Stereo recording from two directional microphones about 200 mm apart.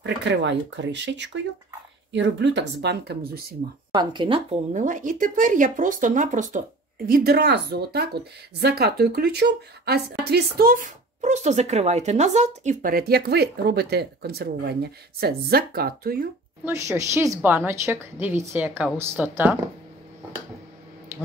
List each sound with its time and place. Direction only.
0.0 s speech: 60° right (ahead or behind)
3.9 s speech: 20° right (ahead or behind)
4.7 s speech: 40° right (ahead or behind)
7.1 s a woman's voice: 50° right (ahead or behind)
16.6 s a woman's voice: 15° right (ahead or behind)